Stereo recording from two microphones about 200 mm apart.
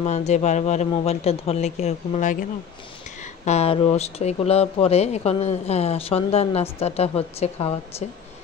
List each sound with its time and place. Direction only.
0.0 s speech: 35° left (ahead or behind)
3.4 s speech: 30° left (ahead or behind)